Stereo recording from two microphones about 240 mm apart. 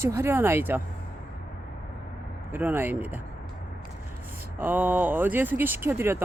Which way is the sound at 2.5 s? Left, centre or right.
Centre.